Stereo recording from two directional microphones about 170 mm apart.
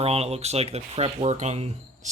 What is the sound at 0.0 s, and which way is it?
Speech, 35° right (ahead or behind).